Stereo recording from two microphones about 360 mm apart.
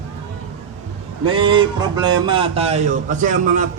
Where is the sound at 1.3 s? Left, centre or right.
Centre.